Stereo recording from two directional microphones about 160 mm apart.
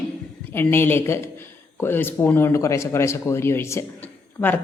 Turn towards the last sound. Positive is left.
turn(degrees=10)  # may be behind; listen again after turning